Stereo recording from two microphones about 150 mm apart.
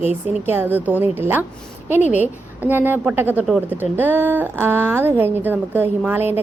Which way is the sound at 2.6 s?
10° right (ahead or behind).